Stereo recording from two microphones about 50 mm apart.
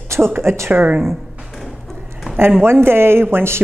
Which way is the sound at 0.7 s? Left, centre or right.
Right.